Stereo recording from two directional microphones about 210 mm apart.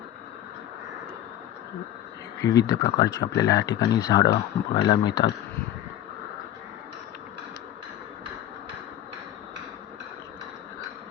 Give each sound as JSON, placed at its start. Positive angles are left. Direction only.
{"t": 2.4, "sound": "speech", "side_deg": 15}